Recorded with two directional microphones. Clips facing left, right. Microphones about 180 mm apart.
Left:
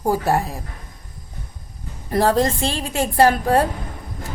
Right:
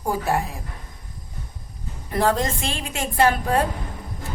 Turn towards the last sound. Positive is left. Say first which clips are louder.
# left 4 dB
turn(degrees=40)  # may be behind; listen again after turning